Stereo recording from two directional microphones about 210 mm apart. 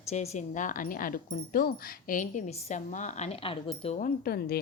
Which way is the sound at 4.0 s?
45° left (ahead or behind).